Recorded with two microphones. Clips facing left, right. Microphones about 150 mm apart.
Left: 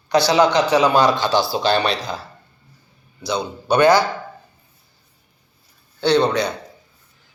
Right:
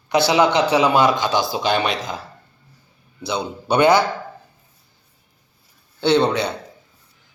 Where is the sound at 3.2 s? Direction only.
25° right (ahead or behind).